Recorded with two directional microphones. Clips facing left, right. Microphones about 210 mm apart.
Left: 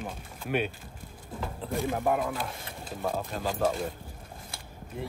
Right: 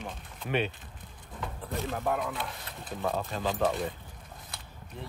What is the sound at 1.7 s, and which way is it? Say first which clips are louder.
Speech: left 4 dB; 15° left (ahead or behind).